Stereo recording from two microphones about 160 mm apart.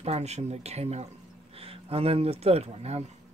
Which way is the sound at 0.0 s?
40° right (ahead or behind).